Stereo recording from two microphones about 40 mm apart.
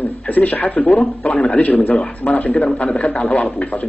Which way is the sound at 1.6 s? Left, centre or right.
Left.